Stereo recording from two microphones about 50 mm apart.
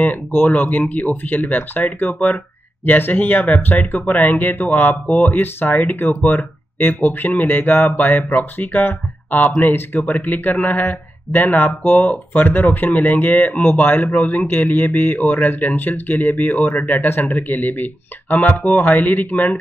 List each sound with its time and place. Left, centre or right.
0.0 s speech: left
5.4 s speech: left